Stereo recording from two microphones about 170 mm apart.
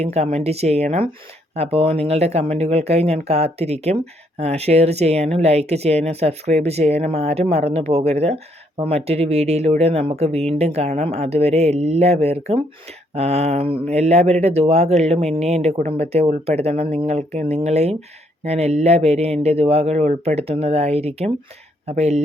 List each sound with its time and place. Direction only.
0.0 s speech: 40° right (ahead or behind)